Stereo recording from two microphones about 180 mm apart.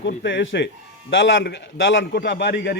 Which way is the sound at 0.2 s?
75° left (ahead or behind).